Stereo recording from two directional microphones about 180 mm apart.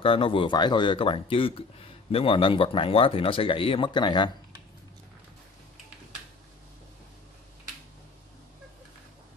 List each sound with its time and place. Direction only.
0.0 s speech: 30° left (ahead or behind)